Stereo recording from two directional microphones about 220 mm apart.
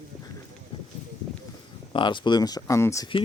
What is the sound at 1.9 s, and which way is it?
Speech, 20° left (ahead or behind).